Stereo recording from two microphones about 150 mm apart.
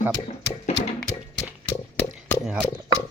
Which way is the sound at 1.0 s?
5° left (ahead or behind).